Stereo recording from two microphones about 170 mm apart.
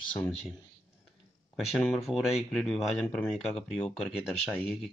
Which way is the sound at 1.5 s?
Centre (ahead or behind).